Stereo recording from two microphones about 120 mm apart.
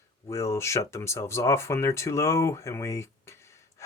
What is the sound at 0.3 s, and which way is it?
Speech, 25° left (ahead or behind).